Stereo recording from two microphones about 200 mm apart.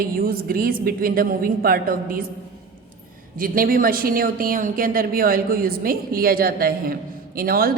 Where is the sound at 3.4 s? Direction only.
45° right (ahead or behind).